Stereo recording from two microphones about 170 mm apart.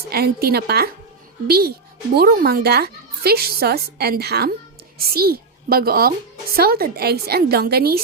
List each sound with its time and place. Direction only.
0.1 s a child's voice: 65° right (ahead or behind)